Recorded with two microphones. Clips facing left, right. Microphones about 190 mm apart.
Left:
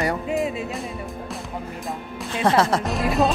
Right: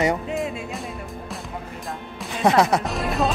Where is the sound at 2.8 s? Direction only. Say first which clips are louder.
Left 3 dB; centre (ahead or behind).